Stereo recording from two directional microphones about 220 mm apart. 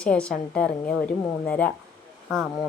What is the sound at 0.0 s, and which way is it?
A woman's voice, 5° left (ahead or behind).